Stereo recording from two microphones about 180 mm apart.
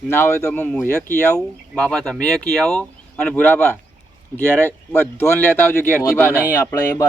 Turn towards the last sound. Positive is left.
turn(degrees=10)  # may be behind; listen again after turning